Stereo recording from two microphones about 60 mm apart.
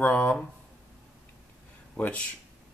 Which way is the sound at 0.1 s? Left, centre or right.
Left.